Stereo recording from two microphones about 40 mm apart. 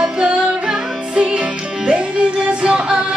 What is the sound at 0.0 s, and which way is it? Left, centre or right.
Music, right.